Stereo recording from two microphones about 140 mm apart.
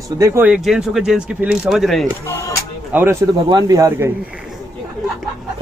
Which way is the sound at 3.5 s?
30° right (ahead or behind).